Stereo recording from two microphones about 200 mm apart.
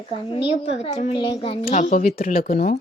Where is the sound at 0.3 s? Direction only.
25° left (ahead or behind); by 2.7 s 50° left (ahead or behind).